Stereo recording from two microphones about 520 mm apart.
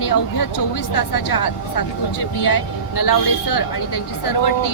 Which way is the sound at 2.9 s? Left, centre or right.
Left.